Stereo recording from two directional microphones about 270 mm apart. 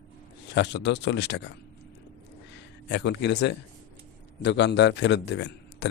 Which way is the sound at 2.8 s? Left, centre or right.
Left.